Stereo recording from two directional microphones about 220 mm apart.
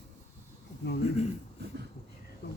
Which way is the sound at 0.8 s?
55° left (ahead or behind).